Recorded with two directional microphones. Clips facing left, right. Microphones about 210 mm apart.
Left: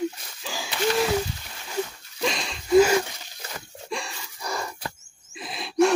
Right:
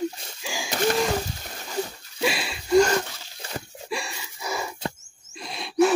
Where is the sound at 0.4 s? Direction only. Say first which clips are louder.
Right 1 dB; 10° right (ahead or behind).